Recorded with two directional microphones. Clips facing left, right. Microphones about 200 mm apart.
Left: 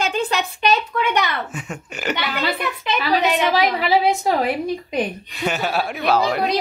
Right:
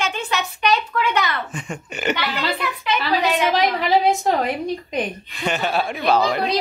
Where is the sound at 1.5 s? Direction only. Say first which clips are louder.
Right 1 dB; 5° left (ahead or behind).